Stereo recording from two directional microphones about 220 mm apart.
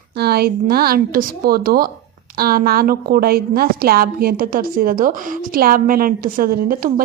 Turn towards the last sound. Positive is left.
turn(degrees=-40)  # may be behind; listen again after turning